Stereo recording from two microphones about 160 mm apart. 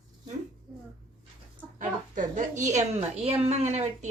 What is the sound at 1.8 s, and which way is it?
A woman's voice, 50° right (ahead or behind).